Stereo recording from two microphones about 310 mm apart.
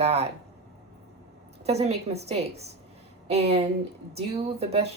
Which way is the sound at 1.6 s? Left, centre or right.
Right.